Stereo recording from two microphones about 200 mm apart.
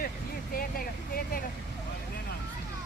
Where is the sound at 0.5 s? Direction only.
45° left (ahead or behind).